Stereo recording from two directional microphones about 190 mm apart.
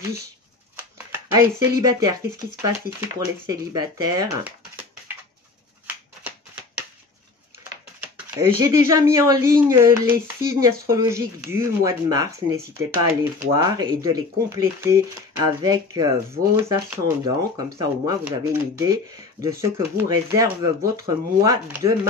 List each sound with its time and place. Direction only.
0.9 s a sound: 15° right (ahead or behind)
1.9 s speech: 15° right (ahead or behind)
3.4 s speech: 20° right (ahead or behind)
8.4 s speech: 15° right (ahead or behind)